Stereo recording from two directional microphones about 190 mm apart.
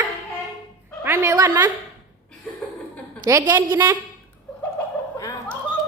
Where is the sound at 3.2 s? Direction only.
15° right (ahead or behind).